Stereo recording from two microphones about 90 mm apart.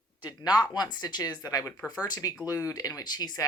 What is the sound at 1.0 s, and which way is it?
Speech, 50° left (ahead or behind).